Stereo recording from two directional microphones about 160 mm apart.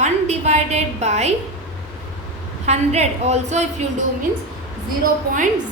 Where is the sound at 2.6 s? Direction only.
45° right (ahead or behind).